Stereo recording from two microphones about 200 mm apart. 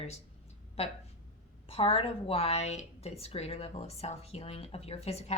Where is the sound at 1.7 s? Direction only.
25° left (ahead or behind).